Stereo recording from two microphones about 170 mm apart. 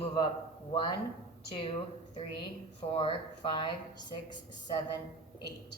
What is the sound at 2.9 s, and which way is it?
Music, 30° left (ahead or behind).